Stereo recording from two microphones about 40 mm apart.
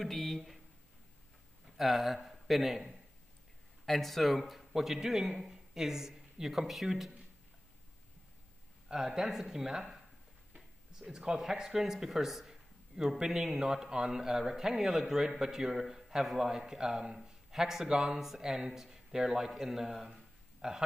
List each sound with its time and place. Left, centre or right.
0.0 s a man's voice: centre
1.8 s a man's voice: centre
8.8 s speech: centre
20.6 s a sound: centre